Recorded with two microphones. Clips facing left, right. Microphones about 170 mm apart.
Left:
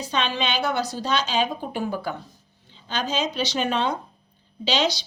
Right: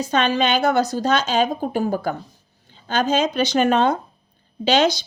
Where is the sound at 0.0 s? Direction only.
45° right (ahead or behind).